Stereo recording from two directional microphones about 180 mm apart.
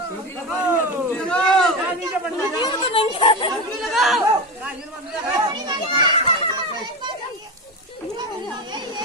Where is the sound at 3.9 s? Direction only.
Centre (ahead or behind).